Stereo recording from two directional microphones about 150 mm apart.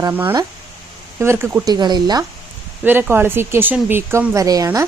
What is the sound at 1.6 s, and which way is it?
Speech, 30° right (ahead or behind).